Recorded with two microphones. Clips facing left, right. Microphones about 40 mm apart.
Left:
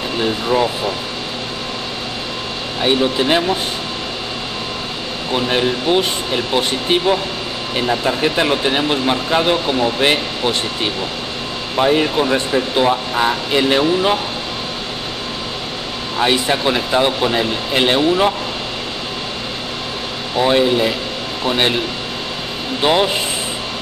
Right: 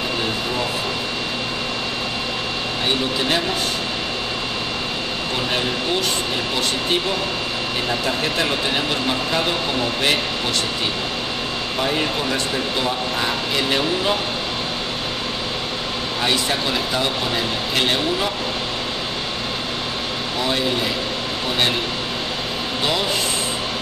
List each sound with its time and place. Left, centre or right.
0.2 s speech: left
2.8 s speech: centre
5.3 s speech: centre
7.8 s speech: centre
11.7 s speech: centre
16.2 s speech: centre
20.3 s speech: left
22.8 s speech: left